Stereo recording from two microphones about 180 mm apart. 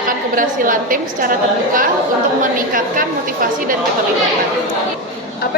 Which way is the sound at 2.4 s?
50° right (ahead or behind).